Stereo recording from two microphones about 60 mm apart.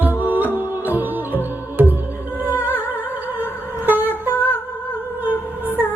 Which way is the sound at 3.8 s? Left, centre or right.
Right.